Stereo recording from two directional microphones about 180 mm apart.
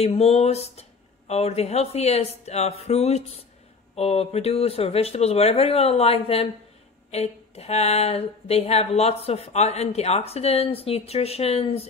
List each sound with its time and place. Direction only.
0.0 s speech: 35° left (ahead or behind)